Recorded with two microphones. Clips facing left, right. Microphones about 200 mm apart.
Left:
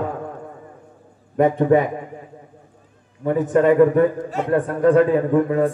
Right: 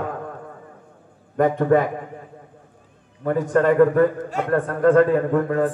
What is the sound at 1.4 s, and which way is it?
Speech, 15° left (ahead or behind).